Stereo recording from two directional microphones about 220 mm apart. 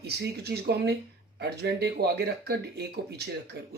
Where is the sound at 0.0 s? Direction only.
45° right (ahead or behind).